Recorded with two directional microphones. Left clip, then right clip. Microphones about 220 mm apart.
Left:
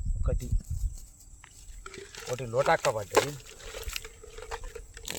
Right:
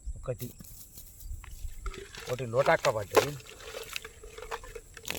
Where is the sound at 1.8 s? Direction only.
5° left (ahead or behind).